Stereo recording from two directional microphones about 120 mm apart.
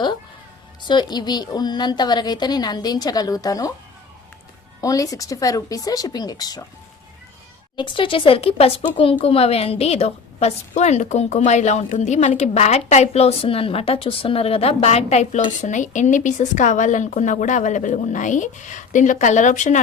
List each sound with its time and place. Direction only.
0.8 s a woman's voice: 40° left (ahead or behind)
4.8 s speech: 30° left (ahead or behind)
7.8 s a woman's voice: 45° left (ahead or behind); by 19.8 s 90° left